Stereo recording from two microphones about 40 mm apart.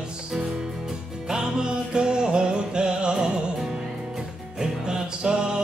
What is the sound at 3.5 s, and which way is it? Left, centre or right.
Music, centre.